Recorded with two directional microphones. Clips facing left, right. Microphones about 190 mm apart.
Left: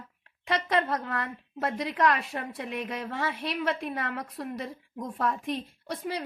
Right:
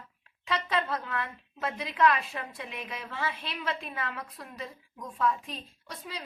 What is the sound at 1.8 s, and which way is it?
A woman's voice, 65° left (ahead or behind).